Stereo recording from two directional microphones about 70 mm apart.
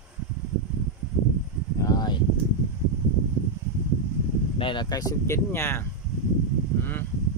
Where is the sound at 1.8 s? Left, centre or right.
Left.